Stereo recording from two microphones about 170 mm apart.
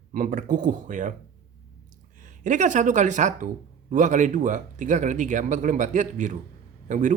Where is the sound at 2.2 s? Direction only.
45° right (ahead or behind).